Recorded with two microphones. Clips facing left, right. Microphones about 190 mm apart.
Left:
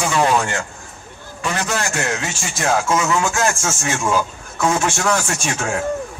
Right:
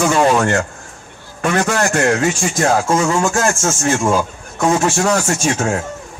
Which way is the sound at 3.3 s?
40° right (ahead or behind).